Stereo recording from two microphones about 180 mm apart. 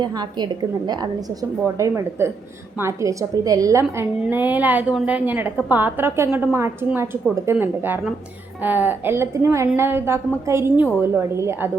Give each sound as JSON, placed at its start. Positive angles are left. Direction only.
{"t": 0.0, "sound": "a woman's voice", "side_deg": -25}